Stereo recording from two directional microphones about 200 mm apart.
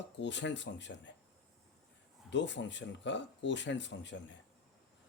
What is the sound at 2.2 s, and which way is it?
Speech, 60° left (ahead or behind).